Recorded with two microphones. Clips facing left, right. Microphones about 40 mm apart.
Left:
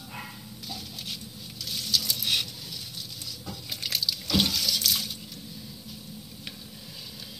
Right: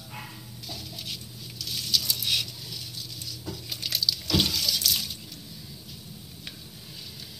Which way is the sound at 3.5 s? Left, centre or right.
Left.